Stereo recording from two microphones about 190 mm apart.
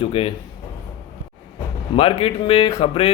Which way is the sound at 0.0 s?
30° left (ahead or behind).